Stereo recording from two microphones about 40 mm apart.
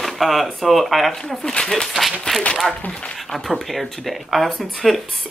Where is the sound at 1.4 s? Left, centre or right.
Left.